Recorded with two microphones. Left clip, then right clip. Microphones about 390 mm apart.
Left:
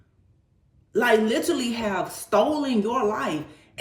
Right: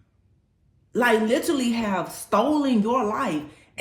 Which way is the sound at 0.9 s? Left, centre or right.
Centre.